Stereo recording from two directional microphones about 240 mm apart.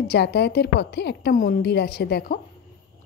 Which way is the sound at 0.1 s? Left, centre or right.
Left.